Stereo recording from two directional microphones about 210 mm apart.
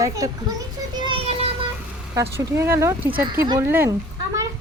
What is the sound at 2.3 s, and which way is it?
Speech, 10° right (ahead or behind).